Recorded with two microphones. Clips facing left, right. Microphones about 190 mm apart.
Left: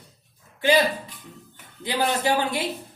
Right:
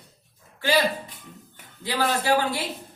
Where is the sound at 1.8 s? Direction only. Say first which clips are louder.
Left 1 dB; 20° left (ahead or behind).